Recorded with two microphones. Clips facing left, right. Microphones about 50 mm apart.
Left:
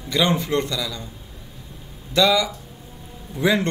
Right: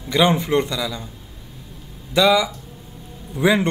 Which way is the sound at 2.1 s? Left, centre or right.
Centre.